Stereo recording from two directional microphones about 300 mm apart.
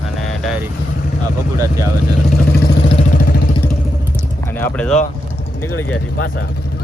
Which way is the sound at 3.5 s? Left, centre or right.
Centre.